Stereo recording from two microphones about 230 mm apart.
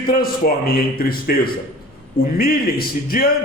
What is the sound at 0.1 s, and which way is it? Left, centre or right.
A man's voice, left.